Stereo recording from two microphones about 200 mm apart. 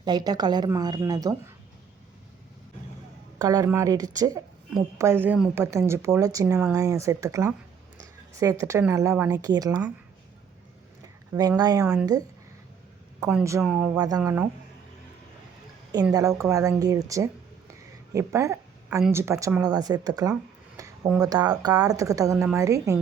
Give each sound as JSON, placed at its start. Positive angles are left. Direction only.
{"t": 0.0, "sound": "a woman's voice", "side_deg": -20}
{"t": 3.3, "sound": "speech", "side_deg": -15}
{"t": 11.0, "sound": "speech", "side_deg": -15}
{"t": 13.1, "sound": "speech", "side_deg": -15}
{"t": 16.1, "sound": "a woman's voice", "side_deg": -15}
{"t": 20.7, "sound": "a sound", "side_deg": -15}
{"t": 21.2, "sound": "speech", "side_deg": -20}